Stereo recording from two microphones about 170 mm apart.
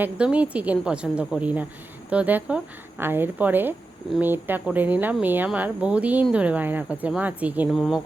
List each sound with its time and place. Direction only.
0.0 s a woman's voice: 5° right (ahead or behind)